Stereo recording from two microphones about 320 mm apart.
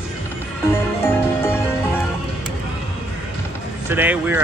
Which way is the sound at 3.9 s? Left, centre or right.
Centre.